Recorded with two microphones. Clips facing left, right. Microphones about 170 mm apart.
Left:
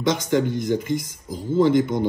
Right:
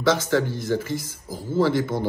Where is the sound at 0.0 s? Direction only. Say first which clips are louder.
Even; 20° left (ahead or behind).